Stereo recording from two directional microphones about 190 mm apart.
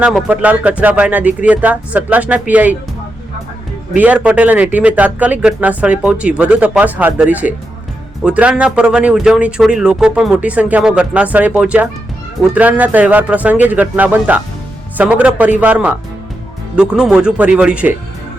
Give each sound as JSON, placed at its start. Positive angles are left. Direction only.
{"t": 0.0, "sound": "speech", "side_deg": -5}
{"t": 3.9, "sound": "speech", "side_deg": -10}